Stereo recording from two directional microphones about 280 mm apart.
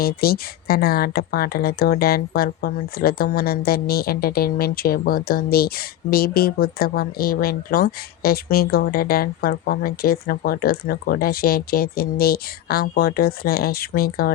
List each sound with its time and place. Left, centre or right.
0.0 s speech: left